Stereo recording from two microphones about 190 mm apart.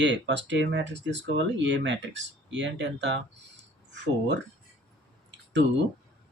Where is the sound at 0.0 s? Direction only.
70° right (ahead or behind).